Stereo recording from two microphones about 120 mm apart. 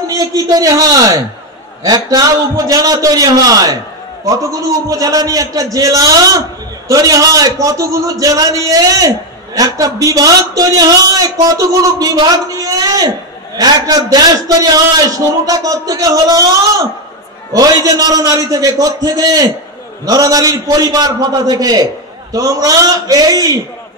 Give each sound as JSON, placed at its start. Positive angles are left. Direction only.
{"t": 0.0, "sound": "a man's voice", "side_deg": -30}